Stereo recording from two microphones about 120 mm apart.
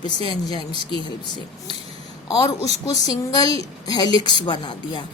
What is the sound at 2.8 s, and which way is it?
Speech, 30° left (ahead or behind).